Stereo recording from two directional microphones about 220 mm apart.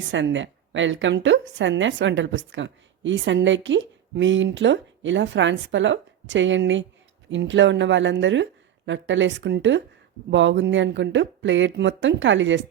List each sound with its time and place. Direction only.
0.1 s speech: 55° right (ahead or behind)